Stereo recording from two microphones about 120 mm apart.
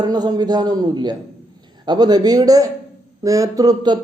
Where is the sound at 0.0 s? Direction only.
35° right (ahead or behind).